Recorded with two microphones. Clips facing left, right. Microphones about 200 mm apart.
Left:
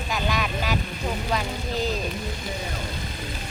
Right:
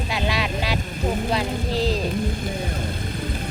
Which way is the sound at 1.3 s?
35° right (ahead or behind).